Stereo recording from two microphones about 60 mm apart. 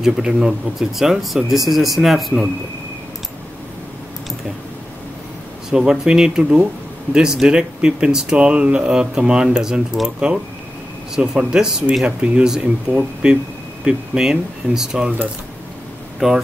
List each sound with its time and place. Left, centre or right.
0.0 s speech: centre
5.7 s speech: centre
12.2 s speech: centre
16.2 s speech: centre